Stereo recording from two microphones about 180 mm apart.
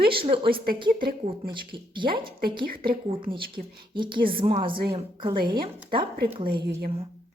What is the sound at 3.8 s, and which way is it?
A woman's voice, 25° right (ahead or behind).